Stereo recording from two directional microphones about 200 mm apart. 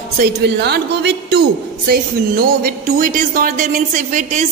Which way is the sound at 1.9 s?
45° right (ahead or behind).